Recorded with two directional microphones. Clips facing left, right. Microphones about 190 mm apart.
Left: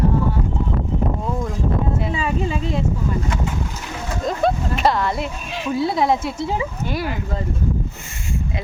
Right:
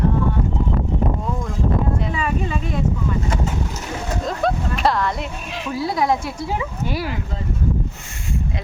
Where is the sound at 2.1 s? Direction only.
25° left (ahead or behind).